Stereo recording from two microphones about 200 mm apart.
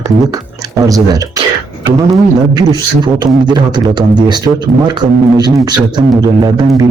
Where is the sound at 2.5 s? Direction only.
20° right (ahead or behind).